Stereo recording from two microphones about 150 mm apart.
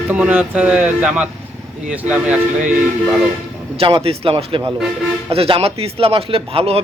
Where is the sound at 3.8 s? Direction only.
40° right (ahead or behind).